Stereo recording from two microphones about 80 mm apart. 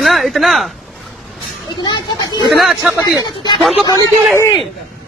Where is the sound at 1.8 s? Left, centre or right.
Left.